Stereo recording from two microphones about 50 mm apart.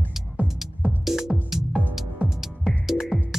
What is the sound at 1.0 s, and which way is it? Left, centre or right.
Music, centre.